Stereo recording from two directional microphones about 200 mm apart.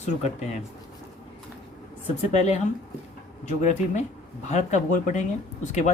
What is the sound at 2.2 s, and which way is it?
Speech, 35° left (ahead or behind).